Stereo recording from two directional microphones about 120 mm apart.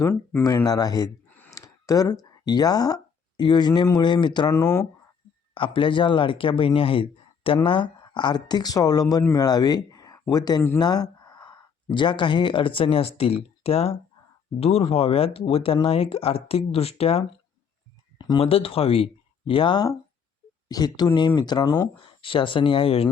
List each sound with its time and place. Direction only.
0.4 s speech: 30° left (ahead or behind)
4.5 s speech: 20° left (ahead or behind)
5.5 s speech: 45° left (ahead or behind)
18.3 s speech: 50° left (ahead or behind)